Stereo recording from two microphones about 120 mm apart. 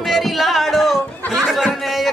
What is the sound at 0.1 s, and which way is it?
Music, centre (ahead or behind).